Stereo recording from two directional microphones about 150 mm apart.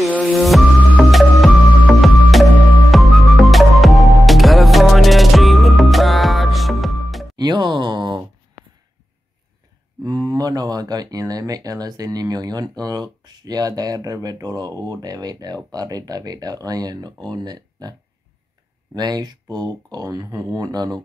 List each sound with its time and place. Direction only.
0.3 s music: centre (ahead or behind)
7.3 s a sound: 30° right (ahead or behind)
10.0 s speech: 25° right (ahead or behind)
18.9 s speech: 25° right (ahead or behind)